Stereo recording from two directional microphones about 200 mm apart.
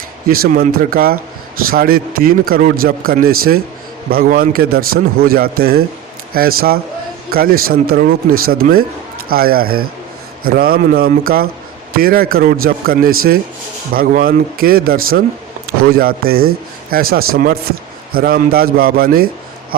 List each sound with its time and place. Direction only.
0.3 s speech: 50° right (ahead or behind)